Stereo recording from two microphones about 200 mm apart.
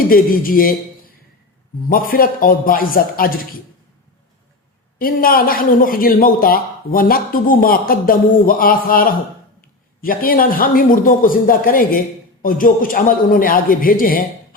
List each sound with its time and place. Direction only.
0.1 s a man's voice: 45° left (ahead or behind)
4.9 s a man's voice: 45° left (ahead or behind)